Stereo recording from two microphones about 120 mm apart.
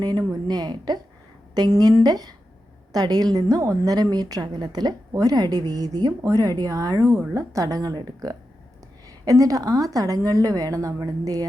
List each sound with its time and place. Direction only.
0.0 s a woman's voice: 35° right (ahead or behind)